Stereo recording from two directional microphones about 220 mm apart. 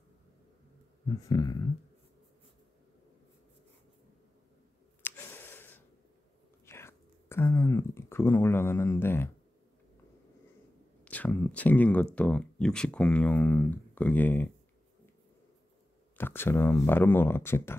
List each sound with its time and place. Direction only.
1.0 s speech: 15° left (ahead or behind)
5.0 s a sound: 10° left (ahead or behind)
6.6 s speech: 10° left (ahead or behind)
11.1 s speech: 5° left (ahead or behind)
16.2 s speech: 10° left (ahead or behind)